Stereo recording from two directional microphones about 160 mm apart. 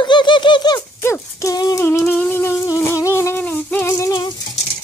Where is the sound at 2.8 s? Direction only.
15° left (ahead or behind).